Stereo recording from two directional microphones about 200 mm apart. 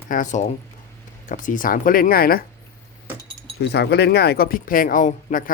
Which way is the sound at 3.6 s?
55° left (ahead or behind).